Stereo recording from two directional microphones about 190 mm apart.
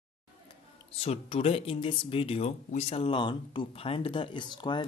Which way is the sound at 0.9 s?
30° left (ahead or behind).